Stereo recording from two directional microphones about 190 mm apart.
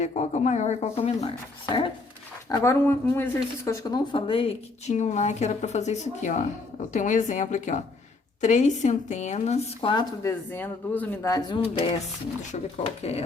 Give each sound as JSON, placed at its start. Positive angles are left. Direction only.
{"t": 0.0, "sound": "speech", "side_deg": 35}
{"t": 10.5, "sound": "speech", "side_deg": 10}